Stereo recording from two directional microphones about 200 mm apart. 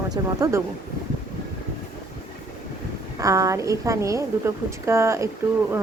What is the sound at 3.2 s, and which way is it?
A woman's voice, 15° right (ahead or behind).